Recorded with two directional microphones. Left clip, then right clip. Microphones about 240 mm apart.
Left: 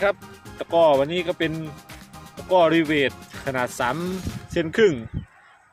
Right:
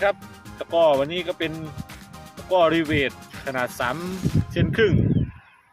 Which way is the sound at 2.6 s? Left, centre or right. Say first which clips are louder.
Left 1 dB; left.